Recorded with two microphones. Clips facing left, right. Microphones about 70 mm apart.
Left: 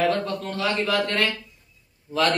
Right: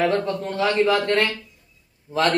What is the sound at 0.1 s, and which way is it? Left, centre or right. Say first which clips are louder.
A man's voice: right 3 dB; right.